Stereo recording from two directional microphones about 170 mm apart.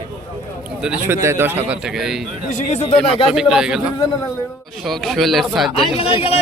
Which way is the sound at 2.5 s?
45° left (ahead or behind).